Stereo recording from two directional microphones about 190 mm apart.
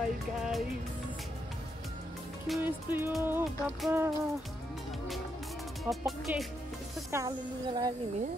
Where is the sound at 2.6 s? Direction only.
10° right (ahead or behind).